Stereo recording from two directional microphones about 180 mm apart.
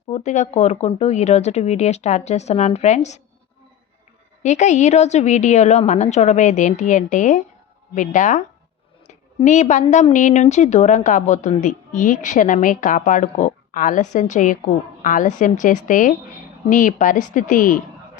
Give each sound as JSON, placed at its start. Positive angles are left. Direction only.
{"t": 0.1, "sound": "speech", "side_deg": 40}
{"t": 4.4, "sound": "a woman's voice", "side_deg": 40}
{"t": 9.0, "sound": "a sound", "side_deg": 40}
{"t": 9.9, "sound": "a woman's voice", "side_deg": 40}